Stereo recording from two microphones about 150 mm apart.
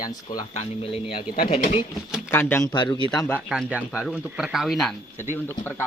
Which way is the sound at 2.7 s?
30° left (ahead or behind).